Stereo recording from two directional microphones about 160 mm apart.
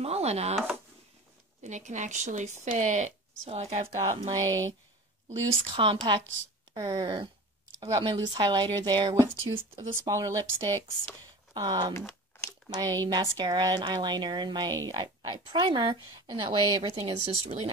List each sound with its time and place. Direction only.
0.0 s speech: 40° right (ahead or behind)
1.6 s speech: 50° right (ahead or behind)
4.4 s speech: 20° right (ahead or behind)
5.5 s a woman's voice: 35° right (ahead or behind)